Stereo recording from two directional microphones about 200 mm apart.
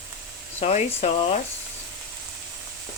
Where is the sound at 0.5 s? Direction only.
30° left (ahead or behind).